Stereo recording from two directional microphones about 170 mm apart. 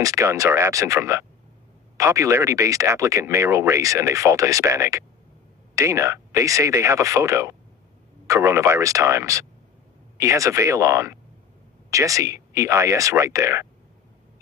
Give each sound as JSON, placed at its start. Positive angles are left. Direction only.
{"t": 0.0, "sound": "speech", "side_deg": -15}